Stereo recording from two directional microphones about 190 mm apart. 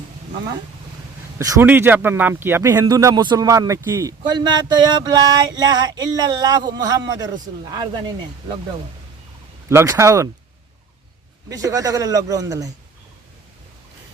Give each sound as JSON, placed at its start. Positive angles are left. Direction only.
{"t": 1.4, "sound": "speech", "side_deg": -15}
{"t": 9.6, "sound": "speech", "side_deg": -15}
{"t": 11.4, "sound": "speech", "side_deg": -20}